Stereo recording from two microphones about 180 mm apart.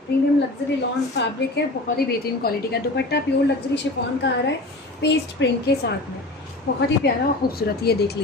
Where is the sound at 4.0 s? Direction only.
75° left (ahead or behind).